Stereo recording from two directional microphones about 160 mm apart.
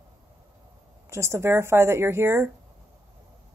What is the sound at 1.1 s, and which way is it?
Speech, 15° right (ahead or behind).